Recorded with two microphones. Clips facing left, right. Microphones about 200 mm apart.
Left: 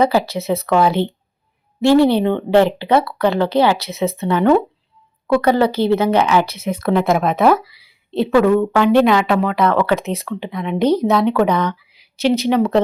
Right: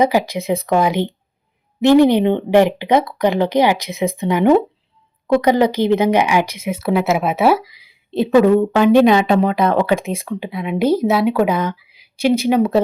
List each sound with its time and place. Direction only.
0.0 s a woman's voice: 15° right (ahead or behind)